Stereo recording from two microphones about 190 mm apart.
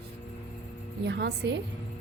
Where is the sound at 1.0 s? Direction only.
60° right (ahead or behind).